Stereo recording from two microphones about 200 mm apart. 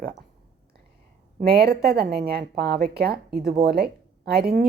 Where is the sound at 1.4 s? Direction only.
50° right (ahead or behind).